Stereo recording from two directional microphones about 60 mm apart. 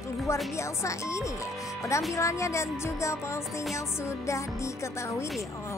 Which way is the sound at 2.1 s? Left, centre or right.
Left.